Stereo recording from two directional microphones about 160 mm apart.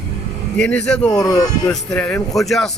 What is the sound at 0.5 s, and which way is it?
Speech, 10° left (ahead or behind).